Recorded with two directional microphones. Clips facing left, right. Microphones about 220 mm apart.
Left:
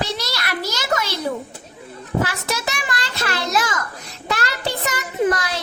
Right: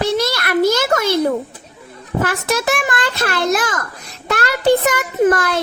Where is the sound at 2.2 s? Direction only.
50° right (ahead or behind).